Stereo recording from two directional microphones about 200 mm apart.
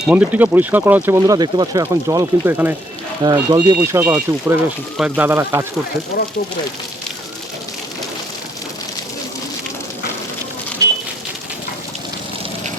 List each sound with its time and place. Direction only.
0.1 s speech: 10° right (ahead or behind)